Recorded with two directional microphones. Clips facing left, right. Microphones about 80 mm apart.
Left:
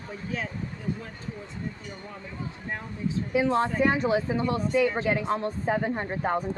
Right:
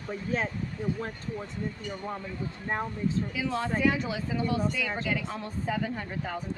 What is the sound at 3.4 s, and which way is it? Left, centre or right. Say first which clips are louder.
Speech: left 2 dB; left.